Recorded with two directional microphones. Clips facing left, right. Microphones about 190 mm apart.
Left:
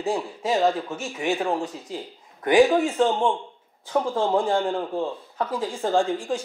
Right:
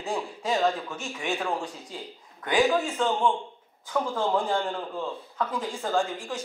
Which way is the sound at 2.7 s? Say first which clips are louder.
Left 5 dB; 25° left (ahead or behind).